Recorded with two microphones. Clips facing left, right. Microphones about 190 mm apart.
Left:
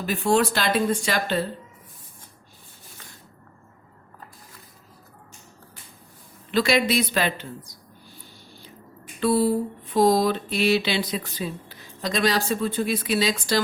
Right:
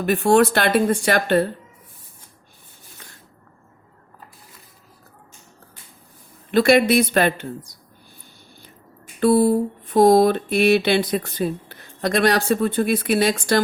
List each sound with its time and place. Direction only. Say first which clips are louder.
0.0 s mantra: right 6 dB; 60° right (ahead or behind)
6.5 s speech: right 6 dB; 55° right (ahead or behind)
9.2 s mantra: right 5 dB; 55° right (ahead or behind)